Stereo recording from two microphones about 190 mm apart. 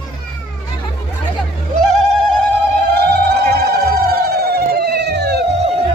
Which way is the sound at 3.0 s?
55° right (ahead or behind).